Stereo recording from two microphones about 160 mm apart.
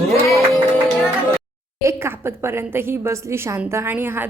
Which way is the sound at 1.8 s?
15° right (ahead or behind).